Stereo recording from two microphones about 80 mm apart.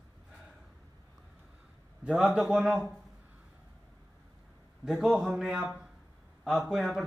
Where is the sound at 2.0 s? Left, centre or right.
Centre.